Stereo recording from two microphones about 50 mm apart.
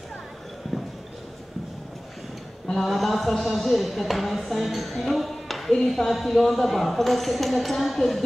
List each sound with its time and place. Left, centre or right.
2.7 s speech: centre